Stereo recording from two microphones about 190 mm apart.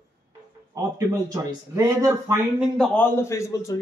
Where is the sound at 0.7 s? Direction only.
15° right (ahead or behind).